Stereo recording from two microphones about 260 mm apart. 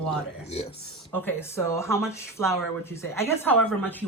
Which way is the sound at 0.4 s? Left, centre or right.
Left.